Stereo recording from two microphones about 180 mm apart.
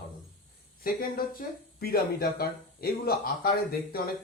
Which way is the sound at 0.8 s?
55° left (ahead or behind).